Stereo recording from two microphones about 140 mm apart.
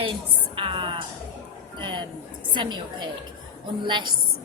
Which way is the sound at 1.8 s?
35° right (ahead or behind).